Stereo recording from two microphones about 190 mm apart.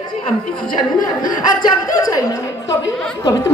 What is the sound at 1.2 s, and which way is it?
Speech, 20° left (ahead or behind).